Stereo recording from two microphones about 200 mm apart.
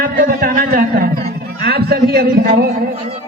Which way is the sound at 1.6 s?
50° right (ahead or behind).